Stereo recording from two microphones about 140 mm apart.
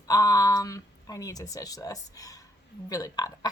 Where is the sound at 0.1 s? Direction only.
25° left (ahead or behind).